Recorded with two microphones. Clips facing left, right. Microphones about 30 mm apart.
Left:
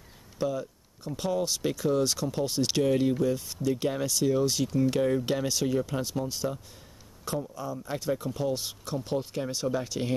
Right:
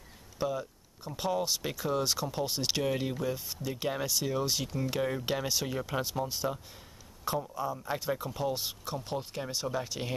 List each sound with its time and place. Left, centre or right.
0.4 s speech: centre
7.5 s speech: right
7.9 s speech: centre